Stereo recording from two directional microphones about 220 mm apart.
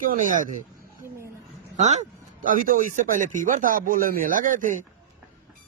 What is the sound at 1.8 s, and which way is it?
Speech, 30° right (ahead or behind).